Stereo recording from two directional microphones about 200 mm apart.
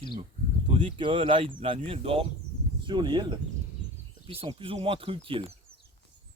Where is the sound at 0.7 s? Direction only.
25° right (ahead or behind).